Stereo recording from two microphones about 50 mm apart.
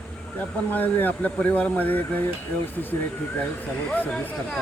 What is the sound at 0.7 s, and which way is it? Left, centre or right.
Speech, left.